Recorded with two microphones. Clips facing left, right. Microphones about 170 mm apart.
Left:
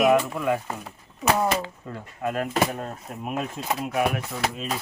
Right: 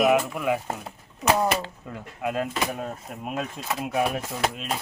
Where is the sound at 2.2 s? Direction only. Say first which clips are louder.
Even; 15° right (ahead or behind).